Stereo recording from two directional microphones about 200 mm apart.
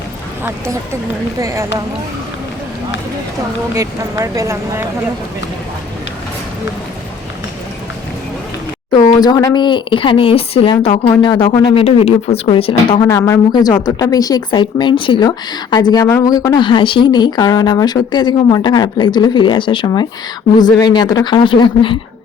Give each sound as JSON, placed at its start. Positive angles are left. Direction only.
{"t": 0.4, "sound": "speech", "side_deg": -15}
{"t": 3.8, "sound": "speech", "side_deg": -15}
{"t": 8.9, "sound": "speech", "side_deg": 20}